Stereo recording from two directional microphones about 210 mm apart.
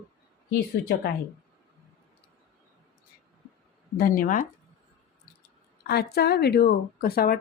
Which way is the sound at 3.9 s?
40° left (ahead or behind).